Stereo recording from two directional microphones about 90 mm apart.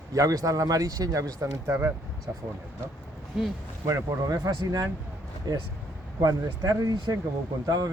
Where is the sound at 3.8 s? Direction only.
40° right (ahead or behind).